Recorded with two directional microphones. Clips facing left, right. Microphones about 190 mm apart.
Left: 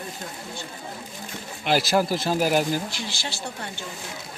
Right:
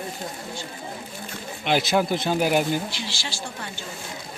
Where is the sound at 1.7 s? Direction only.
Centre (ahead or behind).